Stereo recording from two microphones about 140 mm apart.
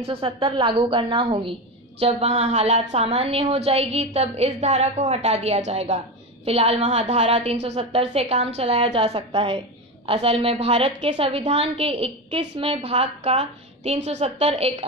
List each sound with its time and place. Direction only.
0.0 s a woman's voice: 40° right (ahead or behind)